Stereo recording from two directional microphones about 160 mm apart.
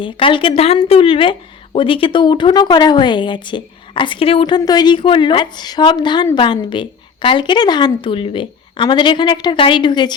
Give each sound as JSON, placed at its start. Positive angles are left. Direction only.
{"t": 0.0, "sound": "a woman's voice", "side_deg": 30}